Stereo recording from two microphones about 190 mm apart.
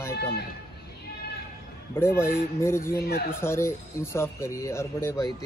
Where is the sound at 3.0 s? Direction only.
55° left (ahead or behind).